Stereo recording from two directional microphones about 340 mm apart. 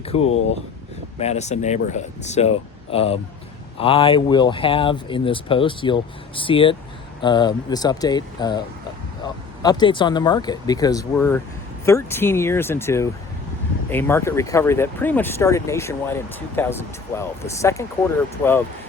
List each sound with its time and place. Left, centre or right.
0.2 s speech: left
1.2 s speech: centre